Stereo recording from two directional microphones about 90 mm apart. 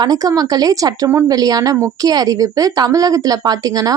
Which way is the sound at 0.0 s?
45° right (ahead or behind).